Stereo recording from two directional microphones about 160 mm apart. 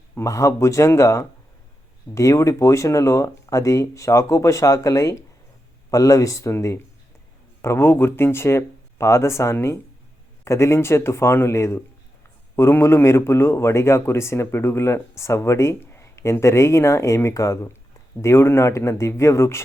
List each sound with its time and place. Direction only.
0.2 s a man's voice: 20° left (ahead or behind)